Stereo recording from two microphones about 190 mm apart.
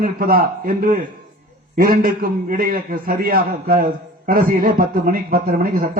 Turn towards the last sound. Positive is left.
turn(degrees=-50)  # may be behind; listen again after turning